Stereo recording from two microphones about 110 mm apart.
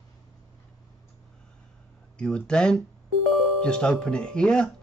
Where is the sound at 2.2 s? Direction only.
10° left (ahead or behind).